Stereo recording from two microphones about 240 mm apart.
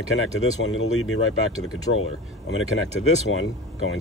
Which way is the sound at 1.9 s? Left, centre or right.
Left.